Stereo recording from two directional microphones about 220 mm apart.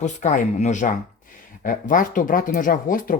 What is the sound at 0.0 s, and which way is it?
Speech, 35° left (ahead or behind).